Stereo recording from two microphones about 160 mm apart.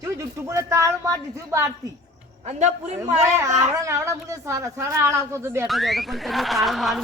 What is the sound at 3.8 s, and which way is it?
Speech, 20° right (ahead or behind).